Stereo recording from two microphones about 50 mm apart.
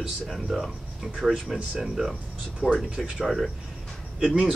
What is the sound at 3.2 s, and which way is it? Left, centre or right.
Speech, centre.